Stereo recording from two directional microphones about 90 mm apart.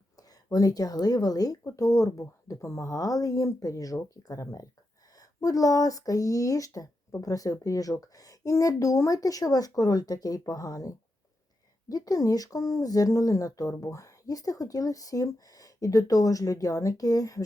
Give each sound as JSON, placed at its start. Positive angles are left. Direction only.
{"t": 0.2, "sound": "speech", "side_deg": 45}